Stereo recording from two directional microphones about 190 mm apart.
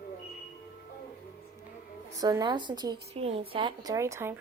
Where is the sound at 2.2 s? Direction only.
20° right (ahead or behind).